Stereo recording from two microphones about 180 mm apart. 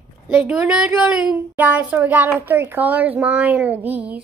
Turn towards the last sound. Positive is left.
turn(degrees=-10)  # may be behind; listen again after turning